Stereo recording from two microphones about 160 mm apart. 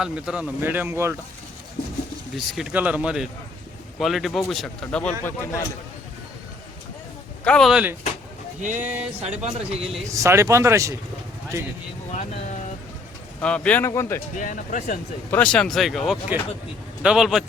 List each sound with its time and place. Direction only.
0.0 s speech: 5° right (ahead or behind)
2.3 s speech: centre (ahead or behind)
5.2 s speech: 15° left (ahead or behind)
7.4 s speech: 5° left (ahead or behind)
8.6 s speech: 50° right (ahead or behind)
10.1 s speech: 20° right (ahead or behind)
12.1 s speech: 45° left (ahead or behind)
13.4 s speech: 10° left (ahead or behind)
14.3 s speech: 50° left (ahead or behind)
15.3 s speech: 5° left (ahead or behind)